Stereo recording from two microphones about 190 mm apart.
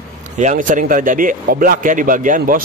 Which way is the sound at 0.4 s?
40° right (ahead or behind).